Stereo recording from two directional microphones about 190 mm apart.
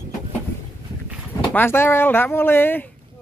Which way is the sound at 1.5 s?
10° left (ahead or behind).